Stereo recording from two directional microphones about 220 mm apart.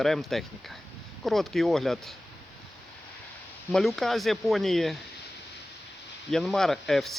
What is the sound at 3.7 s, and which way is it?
Speech, centre (ahead or behind).